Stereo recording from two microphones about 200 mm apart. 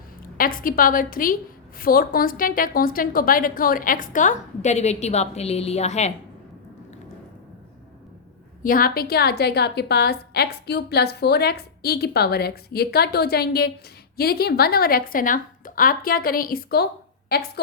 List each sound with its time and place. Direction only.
0.3 s a woman's voice: 45° left (ahead or behind)
8.6 s a woman's voice: 45° left (ahead or behind)